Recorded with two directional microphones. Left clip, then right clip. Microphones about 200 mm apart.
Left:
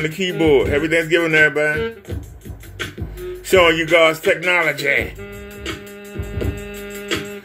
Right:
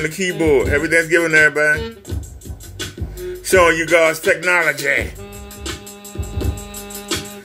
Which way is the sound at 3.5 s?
5° left (ahead or behind).